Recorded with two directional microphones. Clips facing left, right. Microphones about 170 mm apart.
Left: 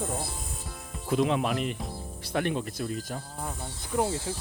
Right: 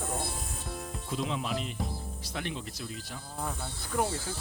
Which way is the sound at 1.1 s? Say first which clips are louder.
Left 8 dB; 65° left (ahead or behind).